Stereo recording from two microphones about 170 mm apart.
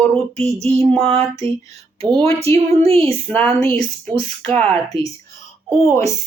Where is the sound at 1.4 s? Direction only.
35° right (ahead or behind).